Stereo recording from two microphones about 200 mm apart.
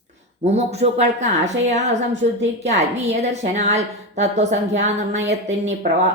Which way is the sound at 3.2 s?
35° right (ahead or behind).